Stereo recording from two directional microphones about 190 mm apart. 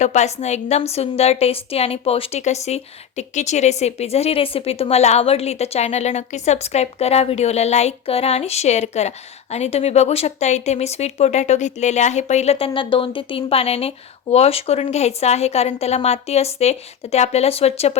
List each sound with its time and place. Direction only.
0.0 s a woman's voice: 35° left (ahead or behind)